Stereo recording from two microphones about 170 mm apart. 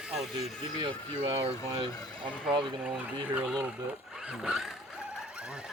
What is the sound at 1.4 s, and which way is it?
Speech, 35° right (ahead or behind).